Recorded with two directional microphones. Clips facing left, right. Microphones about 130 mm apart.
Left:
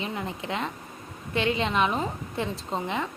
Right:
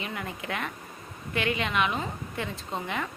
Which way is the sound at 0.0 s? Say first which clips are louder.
Left 3 dB; 25° left (ahead or behind).